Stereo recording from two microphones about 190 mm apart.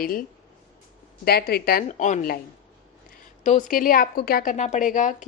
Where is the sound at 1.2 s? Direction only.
55° left (ahead or behind).